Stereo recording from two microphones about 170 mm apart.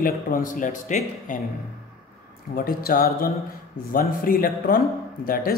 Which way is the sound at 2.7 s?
60° left (ahead or behind).